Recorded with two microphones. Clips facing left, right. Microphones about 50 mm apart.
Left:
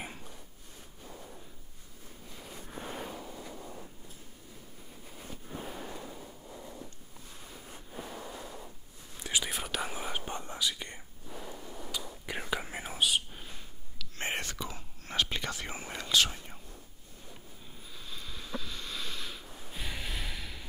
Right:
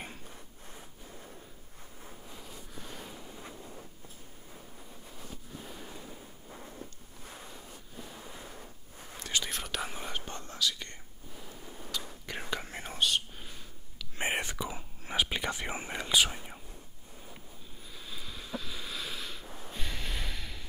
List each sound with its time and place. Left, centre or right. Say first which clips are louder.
2.3 s a sound: left 3 dB; centre
2.7 s a sound: left 7 dB; left
5.2 s fireworks: left 5 dB; left
6.8 s wind noise: right 1 dB; right
7.7 s waves: left 4 dB; left
8.3 s waves: left 3 dB; centre
9.2 s whispering: left 1 dB; centre
10.2 s whispering: even; centre
13.9 s whispering: right 3 dB; centre
17.9 s a sound: right 1 dB; centre
19.7 s snort: even; centre